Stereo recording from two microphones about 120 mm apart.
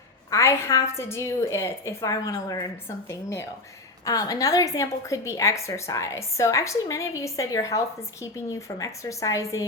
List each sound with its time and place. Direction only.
0.3 s a woman's voice: 25° left (ahead or behind)